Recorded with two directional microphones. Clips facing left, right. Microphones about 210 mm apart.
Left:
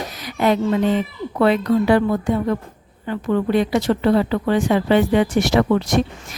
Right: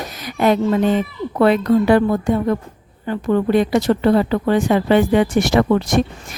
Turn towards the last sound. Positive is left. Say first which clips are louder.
# right 1 dB
turn(degrees=-50)  # may be behind; listen again after turning